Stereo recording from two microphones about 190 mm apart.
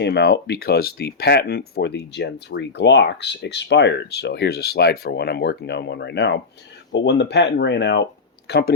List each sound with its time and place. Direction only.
0.0 s speech: 60° left (ahead or behind)